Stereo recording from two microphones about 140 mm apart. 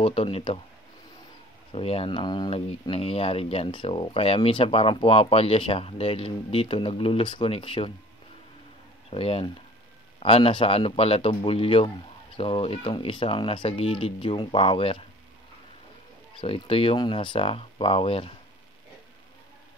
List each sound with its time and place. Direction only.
0.0 s speech: 40° left (ahead or behind)
1.7 s speech: 45° left (ahead or behind)
9.1 s speech: 40° left (ahead or behind)
16.3 s speech: 40° left (ahead or behind)